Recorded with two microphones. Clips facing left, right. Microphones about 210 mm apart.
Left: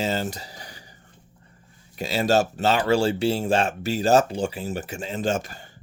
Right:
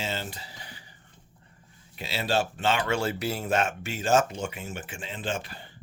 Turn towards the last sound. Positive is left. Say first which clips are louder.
# left 7 dB
turn(degrees=45)  # may be behind; listen again after turning